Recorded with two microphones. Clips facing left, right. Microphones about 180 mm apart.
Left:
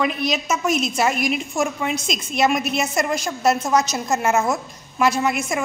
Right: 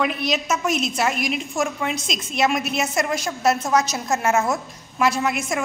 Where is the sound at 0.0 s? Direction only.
Centre (ahead or behind).